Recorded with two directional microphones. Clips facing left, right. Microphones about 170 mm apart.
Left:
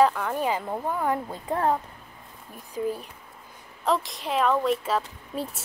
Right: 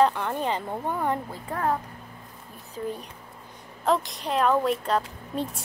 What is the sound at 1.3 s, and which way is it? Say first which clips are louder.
Speech: left 2 dB; 20° left (ahead or behind).